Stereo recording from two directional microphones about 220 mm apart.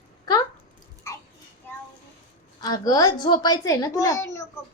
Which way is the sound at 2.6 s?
15° left (ahead or behind).